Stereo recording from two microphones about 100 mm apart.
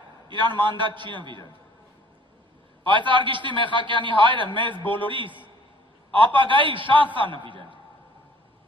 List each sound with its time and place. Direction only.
0.3 s a man's voice: 50° right (ahead or behind)
2.8 s a man's voice: 55° right (ahead or behind)